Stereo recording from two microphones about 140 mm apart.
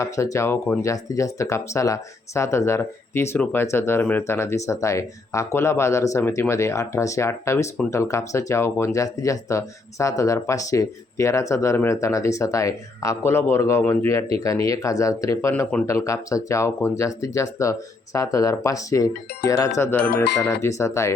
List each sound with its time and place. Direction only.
0.0 s speech: 20° left (ahead or behind)